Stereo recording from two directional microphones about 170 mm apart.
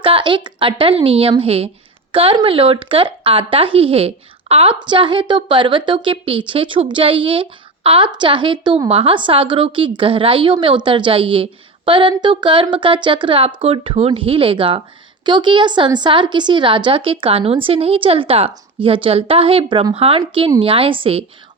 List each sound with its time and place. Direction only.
0.0 s a woman's voice: 30° right (ahead or behind)